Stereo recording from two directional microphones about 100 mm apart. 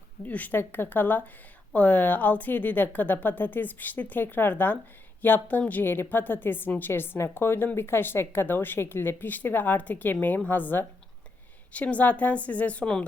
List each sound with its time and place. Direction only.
0.3 s a woman's voice: 15° left (ahead or behind)